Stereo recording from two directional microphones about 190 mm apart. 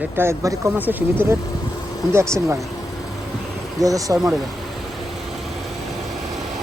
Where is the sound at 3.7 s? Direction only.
20° right (ahead or behind).